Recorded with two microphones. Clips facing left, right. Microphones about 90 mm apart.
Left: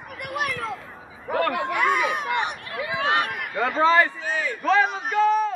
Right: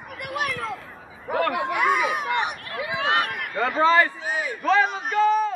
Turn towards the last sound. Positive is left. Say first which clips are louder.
# even
turn(degrees=0)  # may be behind; listen again after turning